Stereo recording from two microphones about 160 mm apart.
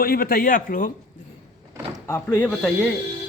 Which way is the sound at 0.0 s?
65° left (ahead or behind).